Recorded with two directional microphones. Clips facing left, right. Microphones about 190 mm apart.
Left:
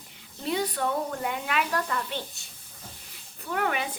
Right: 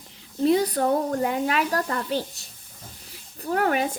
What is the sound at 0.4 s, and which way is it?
A woman's voice, 40° right (ahead or behind).